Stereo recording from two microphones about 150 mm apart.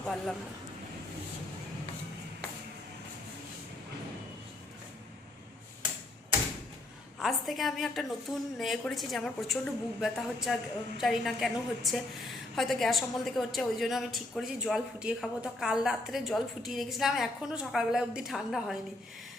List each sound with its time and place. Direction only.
0.0 s speech: 5° left (ahead or behind)
7.2 s a woman's voice: centre (ahead or behind)